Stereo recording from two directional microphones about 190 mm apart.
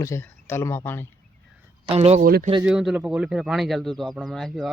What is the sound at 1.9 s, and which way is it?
Speech, 35° right (ahead or behind).